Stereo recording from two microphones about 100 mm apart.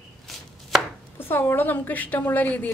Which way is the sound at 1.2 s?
20° left (ahead or behind).